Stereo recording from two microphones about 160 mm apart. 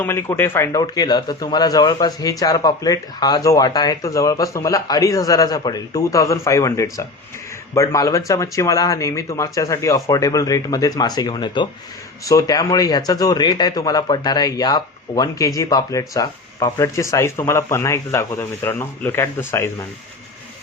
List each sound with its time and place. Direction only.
0.0 s speech: 15° left (ahead or behind)